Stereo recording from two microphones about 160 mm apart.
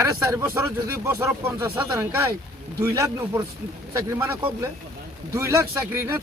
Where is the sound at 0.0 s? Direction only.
20° right (ahead or behind).